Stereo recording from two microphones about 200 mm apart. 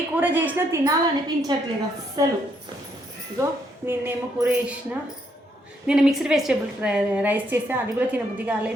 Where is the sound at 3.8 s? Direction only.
10° right (ahead or behind).